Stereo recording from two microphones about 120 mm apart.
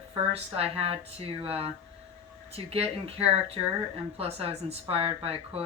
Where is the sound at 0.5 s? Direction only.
55° right (ahead or behind).